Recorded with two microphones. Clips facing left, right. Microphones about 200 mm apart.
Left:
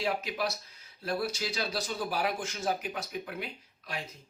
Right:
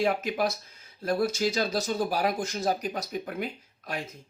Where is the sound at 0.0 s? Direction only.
50° right (ahead or behind).